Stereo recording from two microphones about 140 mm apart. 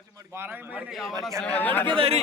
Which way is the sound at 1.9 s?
40° right (ahead or behind).